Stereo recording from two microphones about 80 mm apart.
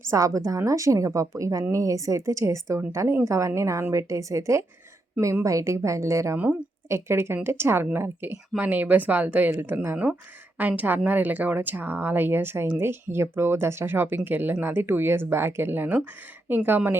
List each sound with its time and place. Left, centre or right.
0.0 s a woman's voice: right
6.3 s speech: centre
6.8 s speech: right